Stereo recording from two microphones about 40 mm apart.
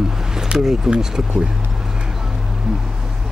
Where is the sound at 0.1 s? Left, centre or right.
Centre.